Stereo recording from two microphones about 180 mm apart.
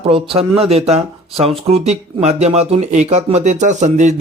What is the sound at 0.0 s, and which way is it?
A man's voice, 30° right (ahead or behind).